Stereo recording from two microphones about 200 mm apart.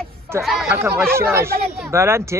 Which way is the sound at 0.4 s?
Centre (ahead or behind).